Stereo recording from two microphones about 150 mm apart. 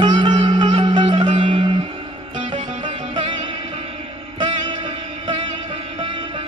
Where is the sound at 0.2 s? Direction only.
35° right (ahead or behind).